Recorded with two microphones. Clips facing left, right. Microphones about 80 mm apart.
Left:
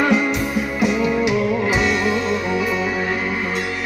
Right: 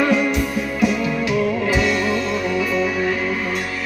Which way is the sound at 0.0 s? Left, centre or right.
Left.